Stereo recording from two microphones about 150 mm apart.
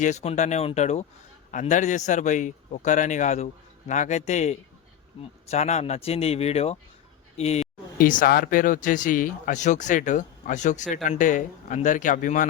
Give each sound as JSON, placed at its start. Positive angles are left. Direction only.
{"t": 0.0, "sound": "a man's voice", "side_deg": 50}
{"t": 7.9, "sound": "speech", "side_deg": 65}